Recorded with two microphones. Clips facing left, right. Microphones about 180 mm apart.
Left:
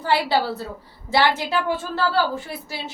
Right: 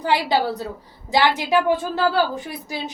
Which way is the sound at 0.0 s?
15° right (ahead or behind).